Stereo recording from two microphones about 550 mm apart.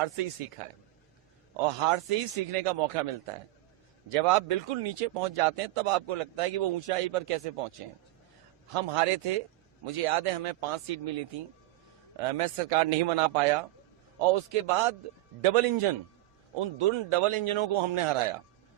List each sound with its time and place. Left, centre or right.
1.8 s speech: right
4.1 s speech: right
8.7 s speech: right
12.1 s a man's voice: right